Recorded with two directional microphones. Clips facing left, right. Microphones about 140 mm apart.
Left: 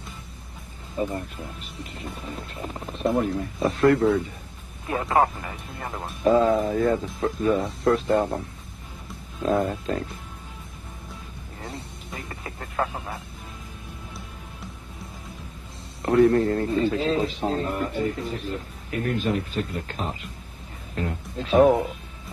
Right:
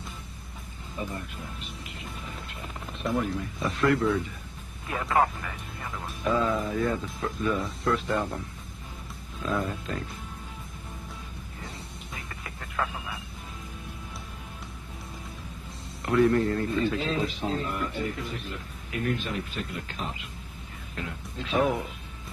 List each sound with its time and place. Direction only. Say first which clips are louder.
1.0 s speech: left 8 dB; 35° left (ahead or behind)
2.5 s speech: left 6 dB; 35° left (ahead or behind)
4.8 s speech: left 3 dB; 30° left (ahead or behind)
5.8 s speech: left 5 dB; 40° left (ahead or behind)
9.4 s speech: left 7 dB; 45° left (ahead or behind)
12.3 s music: left 4 dB; 35° left (ahead or behind)
16.0 s speech: left 4 dB; 35° left (ahead or behind)